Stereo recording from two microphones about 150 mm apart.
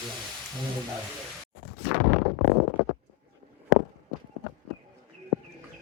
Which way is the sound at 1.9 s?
90° left.